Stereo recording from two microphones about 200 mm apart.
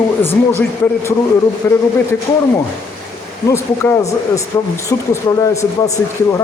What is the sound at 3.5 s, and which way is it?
A man's voice, 15° left (ahead or behind).